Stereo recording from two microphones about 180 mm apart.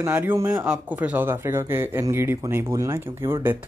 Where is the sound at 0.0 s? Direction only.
10° right (ahead or behind).